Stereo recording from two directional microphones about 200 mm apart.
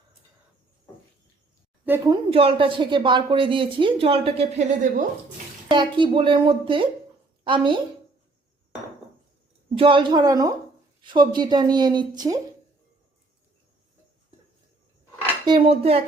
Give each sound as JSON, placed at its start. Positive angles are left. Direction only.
{"t": 2.0, "sound": "a woman's voice", "side_deg": -30}
{"t": 5.6, "sound": "a woman's voice", "side_deg": -25}
{"t": 9.7, "sound": "a woman's voice", "side_deg": -25}
{"t": 15.4, "sound": "a woman's voice", "side_deg": -25}